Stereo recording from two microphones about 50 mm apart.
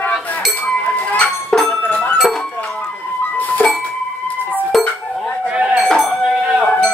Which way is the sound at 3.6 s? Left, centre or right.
Left.